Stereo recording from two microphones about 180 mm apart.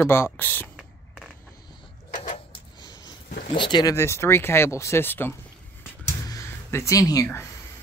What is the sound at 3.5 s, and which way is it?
Speech, 25° left (ahead or behind).